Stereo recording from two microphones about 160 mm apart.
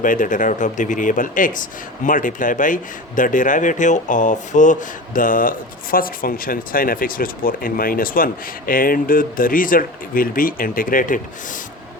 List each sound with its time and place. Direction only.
0.0 s speech: 55° left (ahead or behind)